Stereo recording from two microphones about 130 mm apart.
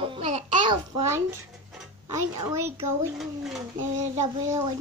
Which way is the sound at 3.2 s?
Centre (ahead or behind).